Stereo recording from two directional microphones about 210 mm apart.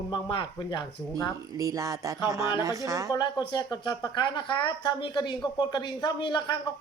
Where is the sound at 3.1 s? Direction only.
20° left (ahead or behind).